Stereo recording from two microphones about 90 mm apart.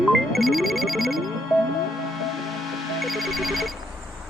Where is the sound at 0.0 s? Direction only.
Centre (ahead or behind).